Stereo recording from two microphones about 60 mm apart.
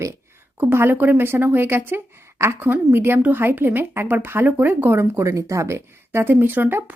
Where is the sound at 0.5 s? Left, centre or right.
Right.